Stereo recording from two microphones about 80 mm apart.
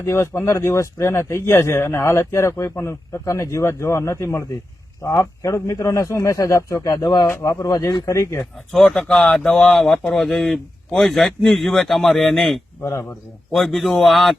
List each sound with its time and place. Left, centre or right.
0.0 s speech: left
7.4 s speech: left
8.9 s speech: centre
12.8 s speech: left
13.5 s speech: centre